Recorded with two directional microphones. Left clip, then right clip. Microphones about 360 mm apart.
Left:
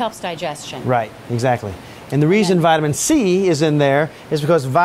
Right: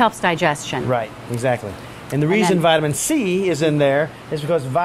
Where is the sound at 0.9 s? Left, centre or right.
Left.